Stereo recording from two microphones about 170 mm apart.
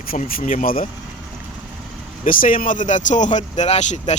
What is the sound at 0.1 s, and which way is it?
Speech, 50° left (ahead or behind).